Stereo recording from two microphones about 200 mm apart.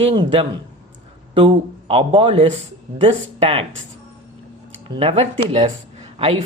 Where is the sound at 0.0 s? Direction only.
25° right (ahead or behind).